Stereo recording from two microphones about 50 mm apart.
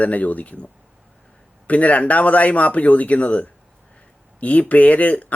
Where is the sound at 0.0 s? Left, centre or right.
Left.